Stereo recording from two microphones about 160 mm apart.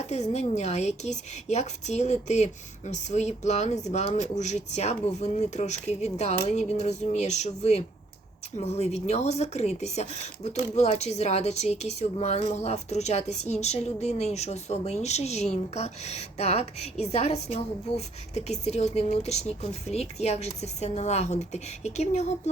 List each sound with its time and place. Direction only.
0.1 s a woman's voice: 45° left (ahead or behind)